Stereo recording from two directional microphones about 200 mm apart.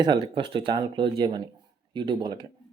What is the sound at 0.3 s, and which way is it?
Speech, 25° right (ahead or behind).